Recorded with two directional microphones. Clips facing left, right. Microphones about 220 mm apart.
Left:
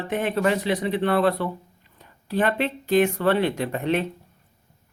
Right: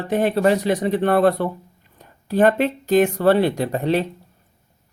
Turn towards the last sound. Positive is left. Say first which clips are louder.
# right 4 dB
turn(degrees=-35)  # may be behind; listen again after turning